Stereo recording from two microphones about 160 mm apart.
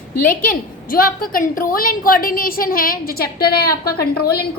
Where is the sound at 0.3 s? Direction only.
60° left (ahead or behind).